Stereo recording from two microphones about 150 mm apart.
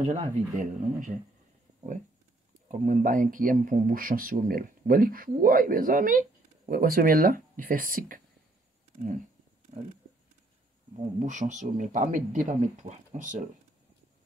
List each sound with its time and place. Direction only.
0.0 s speech: 50° right (ahead or behind)
2.7 s speech: 60° right (ahead or behind)
11.1 s speech: 55° right (ahead or behind)